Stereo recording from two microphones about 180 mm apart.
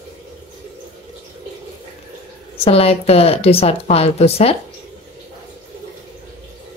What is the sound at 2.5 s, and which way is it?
Speech, 35° left (ahead or behind).